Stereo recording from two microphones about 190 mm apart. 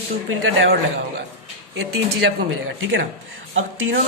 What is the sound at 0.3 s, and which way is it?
Speech, 90° right.